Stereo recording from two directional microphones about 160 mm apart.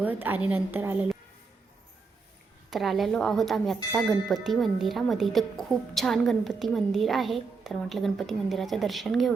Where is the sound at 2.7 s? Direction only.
Centre (ahead or behind).